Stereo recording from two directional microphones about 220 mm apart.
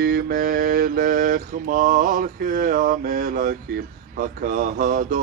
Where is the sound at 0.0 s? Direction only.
40° right (ahead or behind).